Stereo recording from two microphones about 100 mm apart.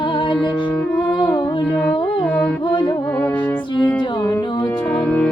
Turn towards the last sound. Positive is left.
turn(degrees=10)  # may be behind; listen again after turning